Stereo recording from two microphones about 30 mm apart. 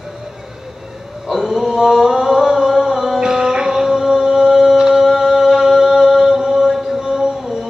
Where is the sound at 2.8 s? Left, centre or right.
Centre.